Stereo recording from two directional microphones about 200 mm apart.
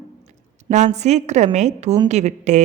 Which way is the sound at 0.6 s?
35° right (ahead or behind).